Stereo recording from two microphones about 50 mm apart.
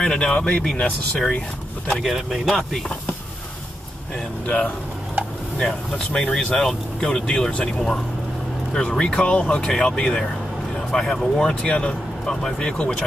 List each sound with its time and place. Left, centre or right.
0.0 s speech: centre
1.9 s speech: centre
5.6 s speech: centre